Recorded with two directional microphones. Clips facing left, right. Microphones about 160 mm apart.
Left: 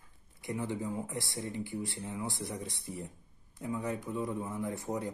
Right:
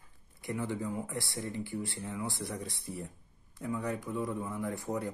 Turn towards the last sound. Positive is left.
turn(degrees=20)  # may be behind; listen again after turning